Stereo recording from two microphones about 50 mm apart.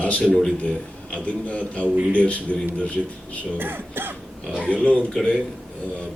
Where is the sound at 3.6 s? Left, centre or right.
Right.